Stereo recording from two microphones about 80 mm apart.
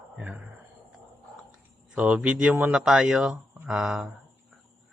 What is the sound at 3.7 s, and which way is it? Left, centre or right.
Speech, centre.